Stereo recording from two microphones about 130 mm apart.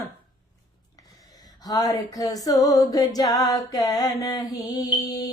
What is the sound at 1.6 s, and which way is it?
Mantra, 30° left (ahead or behind).